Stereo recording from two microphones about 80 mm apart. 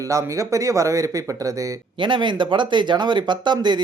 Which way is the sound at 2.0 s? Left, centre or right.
Right.